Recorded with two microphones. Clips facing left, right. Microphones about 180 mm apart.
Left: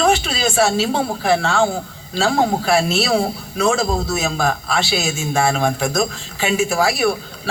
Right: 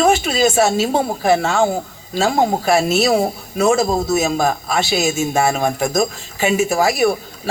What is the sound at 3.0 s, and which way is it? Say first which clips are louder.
A woman's voice: right 3 dB; 20° right (ahead or behind).